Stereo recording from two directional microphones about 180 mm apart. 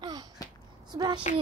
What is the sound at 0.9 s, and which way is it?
Speech, 25° right (ahead or behind).